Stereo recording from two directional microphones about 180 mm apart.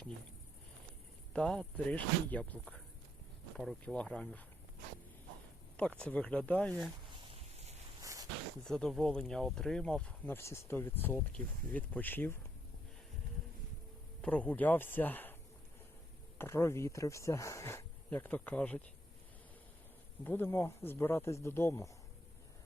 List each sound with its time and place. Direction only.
1.3 s speech: 5° left (ahead or behind)
5.7 s speech: 5° left (ahead or behind)
8.0 s a sound: 20° right (ahead or behind)
8.6 s speech: centre (ahead or behind)
14.2 s speech: 5° left (ahead or behind)
16.4 s speech: 15° left (ahead or behind)
20.2 s speech: 10° left (ahead or behind)